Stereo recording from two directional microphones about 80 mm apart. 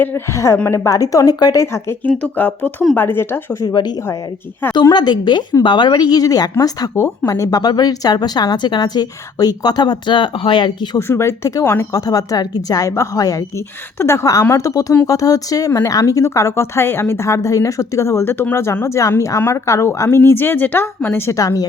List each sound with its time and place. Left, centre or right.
0.0 s a woman's voice: left
1.5 s speech: left
2.0 s speech: centre
3.6 s a woman's voice: left
5.6 s a woman's voice: left
7.6 s a woman's voice: left
10.9 s a woman's voice: left
14.0 s a woman's voice: left
21.3 s a woman's voice: left